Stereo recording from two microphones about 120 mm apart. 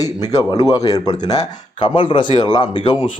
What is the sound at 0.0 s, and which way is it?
Speech, 30° left (ahead or behind).